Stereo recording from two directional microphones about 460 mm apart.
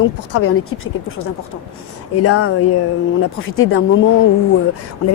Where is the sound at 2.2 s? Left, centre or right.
Left.